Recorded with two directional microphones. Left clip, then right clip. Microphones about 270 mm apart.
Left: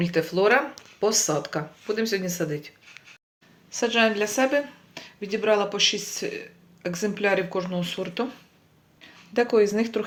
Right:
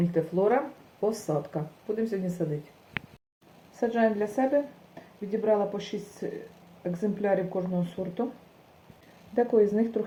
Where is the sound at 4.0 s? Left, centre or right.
Left.